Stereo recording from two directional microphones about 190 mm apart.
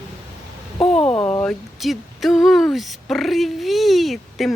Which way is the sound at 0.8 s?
30° left (ahead or behind).